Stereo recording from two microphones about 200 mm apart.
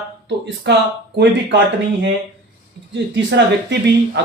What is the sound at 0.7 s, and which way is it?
Speech, 60° right (ahead or behind).